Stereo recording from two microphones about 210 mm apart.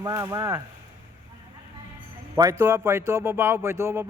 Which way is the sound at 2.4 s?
15° right (ahead or behind).